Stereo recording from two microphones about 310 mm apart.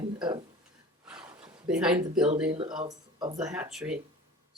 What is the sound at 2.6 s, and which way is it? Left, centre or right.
Speech, centre.